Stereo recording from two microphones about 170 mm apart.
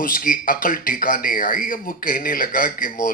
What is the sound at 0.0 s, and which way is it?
Speech, 55° left (ahead or behind).